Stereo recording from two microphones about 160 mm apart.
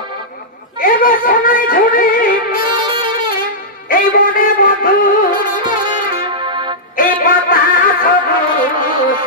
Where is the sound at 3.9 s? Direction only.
60° left (ahead or behind).